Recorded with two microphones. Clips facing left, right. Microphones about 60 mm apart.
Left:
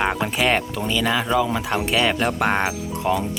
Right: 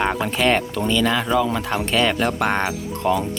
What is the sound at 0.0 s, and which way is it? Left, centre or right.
Speech, centre.